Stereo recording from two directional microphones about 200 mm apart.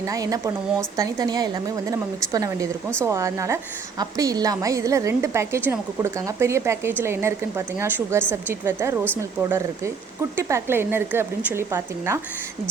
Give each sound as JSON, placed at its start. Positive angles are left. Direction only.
{"t": 0.0, "sound": "a woman's voice", "side_deg": -15}